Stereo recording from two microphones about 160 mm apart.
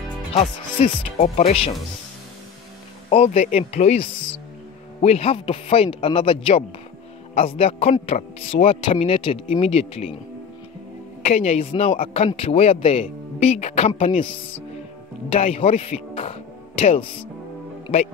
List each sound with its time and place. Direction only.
0.8 s speech: 40° left (ahead or behind)
3.1 s speech: 40° left (ahead or behind)
11.2 s speech: 40° left (ahead or behind)
15.2 s speech: 40° left (ahead or behind)